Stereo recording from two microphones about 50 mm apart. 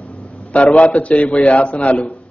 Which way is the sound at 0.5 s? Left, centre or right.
Left.